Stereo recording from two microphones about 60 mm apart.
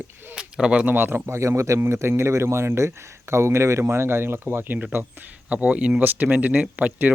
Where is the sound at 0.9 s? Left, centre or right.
Right.